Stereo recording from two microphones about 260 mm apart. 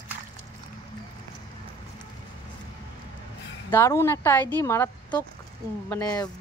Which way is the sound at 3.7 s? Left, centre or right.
Centre.